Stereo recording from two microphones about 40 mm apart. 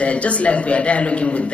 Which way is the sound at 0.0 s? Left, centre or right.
Left.